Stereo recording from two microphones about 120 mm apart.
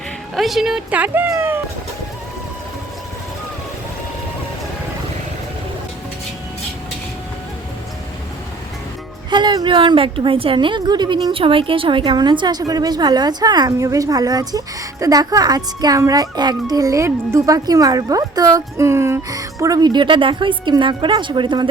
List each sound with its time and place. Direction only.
0.3 s speech: centre (ahead or behind)
1.3 s a sound: 20° right (ahead or behind)
9.3 s speech: 40° right (ahead or behind)